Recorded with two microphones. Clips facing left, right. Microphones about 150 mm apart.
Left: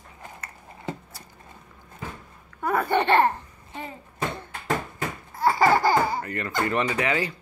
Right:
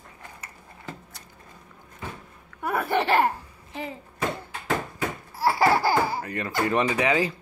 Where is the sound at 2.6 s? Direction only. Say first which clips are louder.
Left 2 dB; 5° right (ahead or behind).